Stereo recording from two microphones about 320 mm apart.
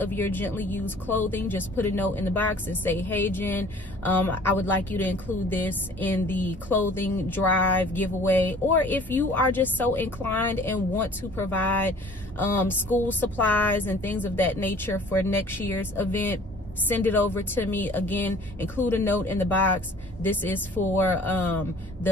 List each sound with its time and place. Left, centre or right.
0.0 s a woman's voice: centre